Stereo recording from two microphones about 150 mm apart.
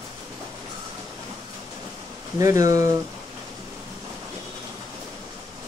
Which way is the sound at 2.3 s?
25° right (ahead or behind).